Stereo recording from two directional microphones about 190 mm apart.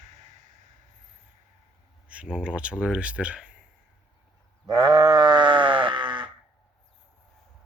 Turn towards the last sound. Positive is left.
turn(degrees=-25)  # may be behind; listen again after turning